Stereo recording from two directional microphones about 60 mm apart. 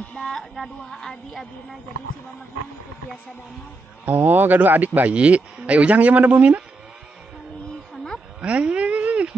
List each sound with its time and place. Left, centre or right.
0.1 s speech: centre
4.0 s speech: right
7.9 s cattle: centre
8.4 s speech: right